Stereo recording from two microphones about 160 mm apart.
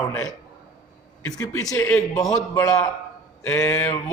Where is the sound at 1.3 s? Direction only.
20° left (ahead or behind).